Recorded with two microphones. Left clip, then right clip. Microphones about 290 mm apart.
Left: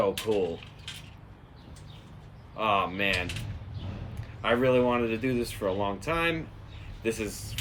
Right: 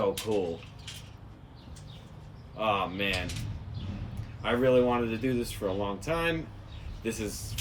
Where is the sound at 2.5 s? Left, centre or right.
Centre.